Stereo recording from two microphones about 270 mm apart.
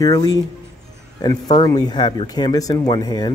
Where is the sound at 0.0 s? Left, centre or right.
Centre.